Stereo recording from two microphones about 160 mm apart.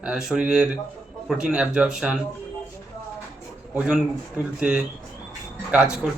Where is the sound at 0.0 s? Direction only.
5° right (ahead or behind).